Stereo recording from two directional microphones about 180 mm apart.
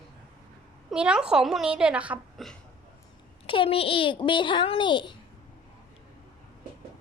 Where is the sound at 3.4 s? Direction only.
30° left (ahead or behind).